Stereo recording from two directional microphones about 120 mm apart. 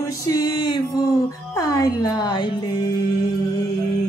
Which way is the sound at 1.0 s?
30° left (ahead or behind).